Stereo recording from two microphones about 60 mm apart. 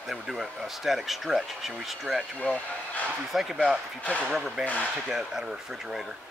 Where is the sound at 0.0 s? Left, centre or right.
Centre.